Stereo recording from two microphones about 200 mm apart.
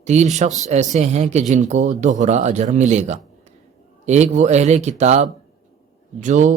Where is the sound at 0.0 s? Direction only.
35° right (ahead or behind).